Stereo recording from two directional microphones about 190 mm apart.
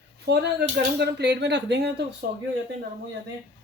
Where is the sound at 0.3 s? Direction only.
60° right (ahead or behind).